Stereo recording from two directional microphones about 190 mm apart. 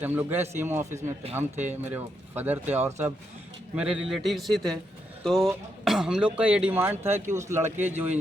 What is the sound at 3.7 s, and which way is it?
Speech, 5° right (ahead or behind).